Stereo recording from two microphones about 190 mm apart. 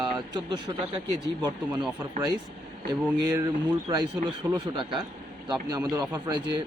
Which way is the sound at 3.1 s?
15° right (ahead or behind).